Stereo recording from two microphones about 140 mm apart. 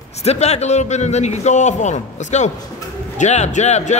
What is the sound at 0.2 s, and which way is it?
A man's voice, 50° left (ahead or behind).